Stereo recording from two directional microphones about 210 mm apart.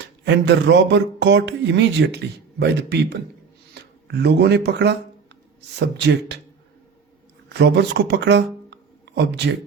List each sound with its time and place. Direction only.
0.0 s speech: 55° right (ahead or behind)
3.8 s a sound: 50° right (ahead or behind)
4.1 s speech: 50° right (ahead or behind)
6.1 s speech: 55° right (ahead or behind)
7.6 s speech: 55° right (ahead or behind)